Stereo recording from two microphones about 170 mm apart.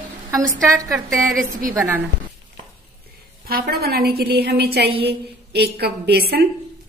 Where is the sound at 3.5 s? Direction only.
65° right (ahead or behind).